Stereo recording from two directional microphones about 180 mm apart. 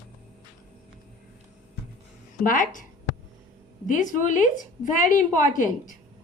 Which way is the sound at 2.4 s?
50° left (ahead or behind).